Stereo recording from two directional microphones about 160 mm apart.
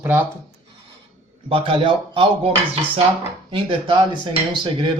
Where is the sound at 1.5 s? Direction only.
30° right (ahead or behind).